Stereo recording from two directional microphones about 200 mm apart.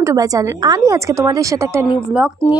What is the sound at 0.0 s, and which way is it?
A woman's voice, 15° right (ahead or behind).